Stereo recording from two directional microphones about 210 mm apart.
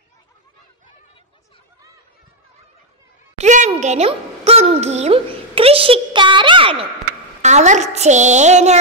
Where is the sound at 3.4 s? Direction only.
35° right (ahead or behind).